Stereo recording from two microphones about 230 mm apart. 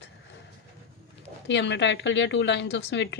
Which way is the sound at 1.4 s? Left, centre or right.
Left.